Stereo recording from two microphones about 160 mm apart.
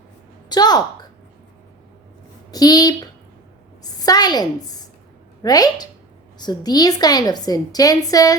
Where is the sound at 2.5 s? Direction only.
25° left (ahead or behind).